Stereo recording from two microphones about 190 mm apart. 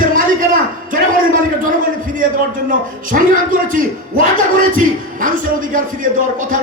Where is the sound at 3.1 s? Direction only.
45° right (ahead or behind).